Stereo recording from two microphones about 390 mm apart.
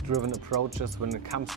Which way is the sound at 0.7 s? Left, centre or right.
Right.